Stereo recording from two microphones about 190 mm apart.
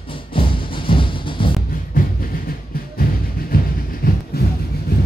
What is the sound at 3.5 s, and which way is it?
Train, 50° left (ahead or behind).